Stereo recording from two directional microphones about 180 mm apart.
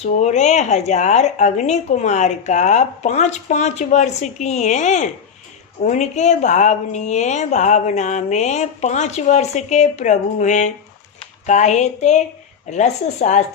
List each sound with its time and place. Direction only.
0.0 s speech: 40° left (ahead or behind)